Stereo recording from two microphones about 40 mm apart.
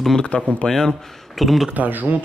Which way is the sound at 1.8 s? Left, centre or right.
Right.